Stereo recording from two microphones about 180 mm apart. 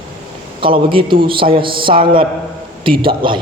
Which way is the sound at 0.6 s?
30° right (ahead or behind).